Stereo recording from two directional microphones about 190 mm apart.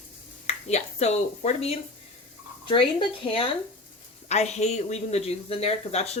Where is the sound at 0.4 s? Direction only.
35° left (ahead or behind).